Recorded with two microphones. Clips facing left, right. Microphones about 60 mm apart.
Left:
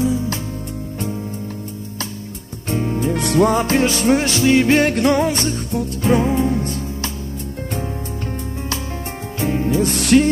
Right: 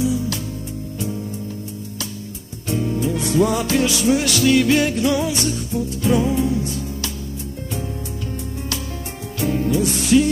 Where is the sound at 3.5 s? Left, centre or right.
Left.